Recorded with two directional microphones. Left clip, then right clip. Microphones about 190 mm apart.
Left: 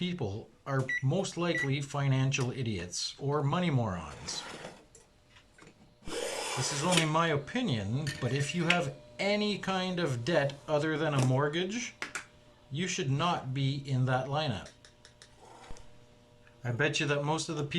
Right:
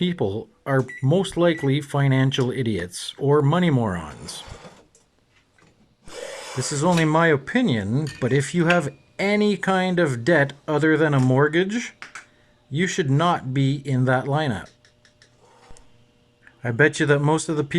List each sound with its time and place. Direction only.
0.0 s speech: 40° right (ahead or behind)
6.6 s speech: 45° right (ahead or behind)
16.6 s speech: 45° right (ahead or behind)